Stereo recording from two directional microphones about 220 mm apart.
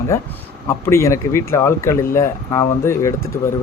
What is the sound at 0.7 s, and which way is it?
Speech, 15° left (ahead or behind).